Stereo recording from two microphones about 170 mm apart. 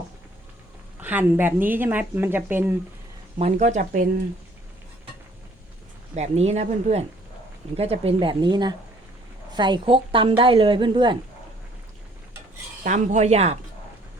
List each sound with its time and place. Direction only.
1.0 s speech: 10° right (ahead or behind)
3.3 s speech: 40° right (ahead or behind)
6.1 s a woman's voice: 40° right (ahead or behind)
12.8 s speech: 45° right (ahead or behind)